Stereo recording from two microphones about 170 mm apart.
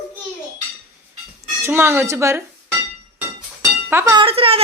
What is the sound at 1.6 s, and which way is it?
Speech, 15° right (ahead or behind).